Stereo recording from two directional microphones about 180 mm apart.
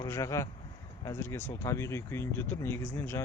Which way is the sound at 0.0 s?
15° left (ahead or behind).